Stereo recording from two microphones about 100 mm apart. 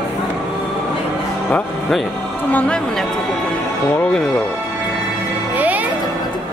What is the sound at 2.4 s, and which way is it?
Speech, 10° left (ahead or behind).